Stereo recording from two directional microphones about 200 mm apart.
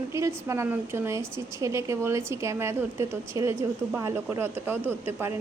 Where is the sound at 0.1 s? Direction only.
15° right (ahead or behind).